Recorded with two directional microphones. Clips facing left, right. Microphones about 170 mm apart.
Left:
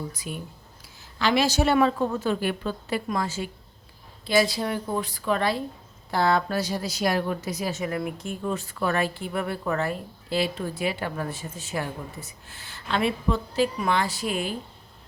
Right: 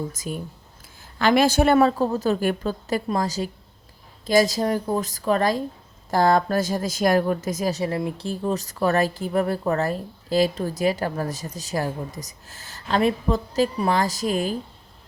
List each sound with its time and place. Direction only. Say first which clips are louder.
0.1 s a woman's voice: right 4 dB; 45° right (ahead or behind)